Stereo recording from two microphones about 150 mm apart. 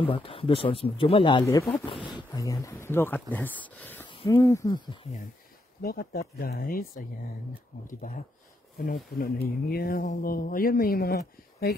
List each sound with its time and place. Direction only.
0.0 s speech: 35° left (ahead or behind)
1.4 s speech: 20° left (ahead or behind)
5.8 s speech: 90° left
7.8 s speech: 65° left (ahead or behind)
8.7 s speech: 75° left (ahead or behind)